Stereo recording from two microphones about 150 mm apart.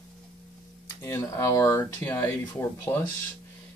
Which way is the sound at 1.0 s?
20° left (ahead or behind).